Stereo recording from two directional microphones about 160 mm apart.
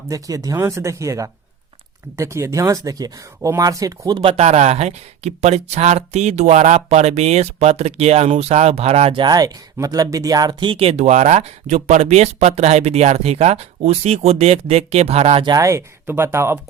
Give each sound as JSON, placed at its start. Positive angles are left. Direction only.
{"t": 0.1, "sound": "speech", "side_deg": -20}
{"t": 9.2, "sound": "speech", "side_deg": -25}
{"t": 15.4, "sound": "speech", "side_deg": -20}